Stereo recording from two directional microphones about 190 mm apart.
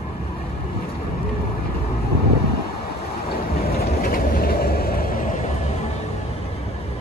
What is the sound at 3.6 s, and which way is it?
Vehicle, 50° left (ahead or behind).